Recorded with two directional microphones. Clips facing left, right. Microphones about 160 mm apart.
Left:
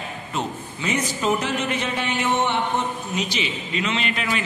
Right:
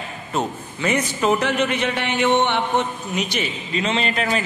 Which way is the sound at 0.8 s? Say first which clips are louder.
Right 3 dB; 60° right (ahead or behind).